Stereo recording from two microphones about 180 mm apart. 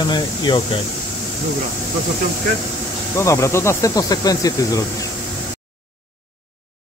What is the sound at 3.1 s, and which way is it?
Speech, 15° left (ahead or behind).